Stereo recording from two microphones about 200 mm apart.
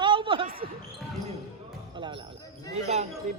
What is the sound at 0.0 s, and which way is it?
Basketball bounce, 25° right (ahead or behind).